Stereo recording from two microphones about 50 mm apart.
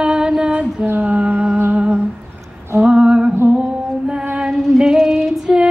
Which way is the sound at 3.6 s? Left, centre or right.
Centre.